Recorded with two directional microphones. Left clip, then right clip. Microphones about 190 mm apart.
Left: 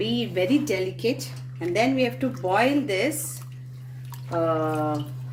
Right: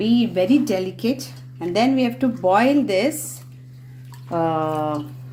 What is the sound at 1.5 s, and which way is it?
Speech, 35° right (ahead or behind).